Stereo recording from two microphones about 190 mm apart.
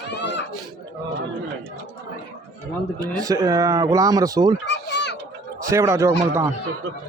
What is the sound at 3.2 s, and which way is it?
Speech, 20° right (ahead or behind).